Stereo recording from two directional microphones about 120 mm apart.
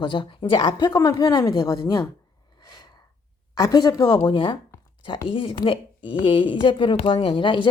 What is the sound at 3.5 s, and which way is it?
Speech, 30° left (ahead or behind).